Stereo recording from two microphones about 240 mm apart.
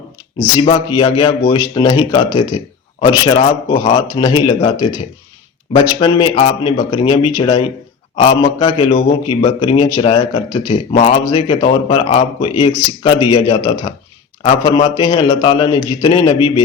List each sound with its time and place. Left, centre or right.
0.5 s a man's voice: left
6.0 s a man's voice: centre